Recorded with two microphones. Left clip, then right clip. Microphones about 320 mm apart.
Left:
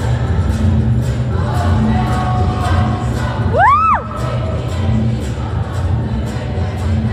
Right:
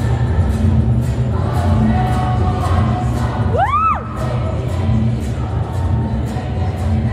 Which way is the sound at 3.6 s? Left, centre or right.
Left.